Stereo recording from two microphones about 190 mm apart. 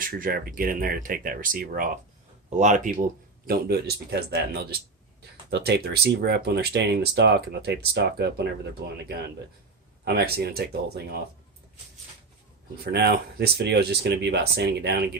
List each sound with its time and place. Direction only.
0.0 s speech: 50° right (ahead or behind)
3.4 s speech: 55° right (ahead or behind)
12.8 s speech: 60° right (ahead or behind)